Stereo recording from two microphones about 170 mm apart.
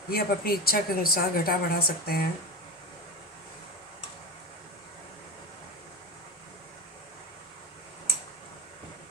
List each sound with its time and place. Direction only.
0.1 s a woman's voice: 60° left (ahead or behind)